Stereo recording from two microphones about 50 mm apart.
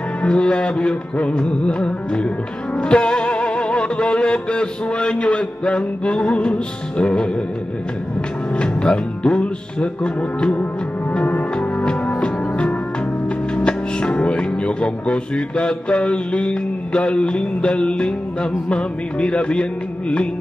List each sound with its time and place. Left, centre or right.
0.2 s music: left
8.5 s music: left
13.7 s speech: left